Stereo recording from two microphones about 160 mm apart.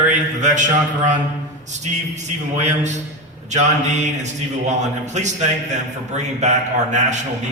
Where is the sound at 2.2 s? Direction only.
50° right (ahead or behind).